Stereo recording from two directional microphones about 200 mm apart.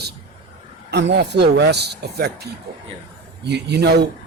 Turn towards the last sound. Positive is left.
turn(degrees=-55)  # may be behind; listen again after turning